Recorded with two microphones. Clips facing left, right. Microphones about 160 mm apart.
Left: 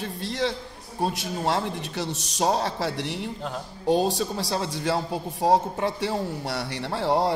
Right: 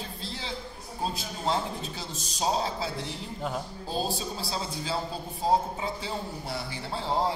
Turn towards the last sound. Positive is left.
turn(degrees=75)  # may be behind; listen again after turning